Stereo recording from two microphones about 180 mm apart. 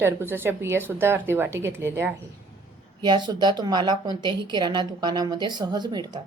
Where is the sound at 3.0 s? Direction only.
25° right (ahead or behind).